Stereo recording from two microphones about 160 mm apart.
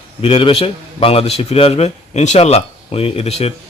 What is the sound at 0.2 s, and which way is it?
A man's voice, 35° left (ahead or behind).